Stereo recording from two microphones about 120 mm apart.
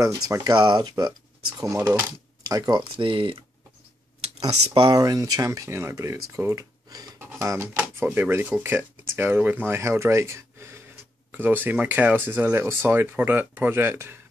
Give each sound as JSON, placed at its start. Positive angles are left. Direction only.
{"t": 0.0, "sound": "speech", "side_deg": -30}
{"t": 4.7, "sound": "speech", "side_deg": -35}
{"t": 7.2, "sound": "a sound", "side_deg": -20}
{"t": 7.7, "sound": "speech", "side_deg": -15}